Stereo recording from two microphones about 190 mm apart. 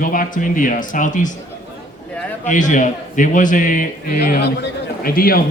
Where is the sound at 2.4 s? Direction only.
40° left (ahead or behind).